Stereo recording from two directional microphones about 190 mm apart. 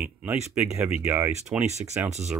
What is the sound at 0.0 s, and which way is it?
Speech, 5° right (ahead or behind).